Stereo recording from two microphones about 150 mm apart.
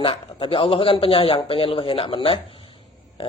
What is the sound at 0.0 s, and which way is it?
A man's voice, 35° left (ahead or behind).